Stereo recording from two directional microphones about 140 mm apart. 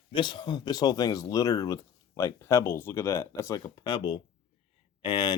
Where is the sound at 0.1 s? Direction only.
35° left (ahead or behind).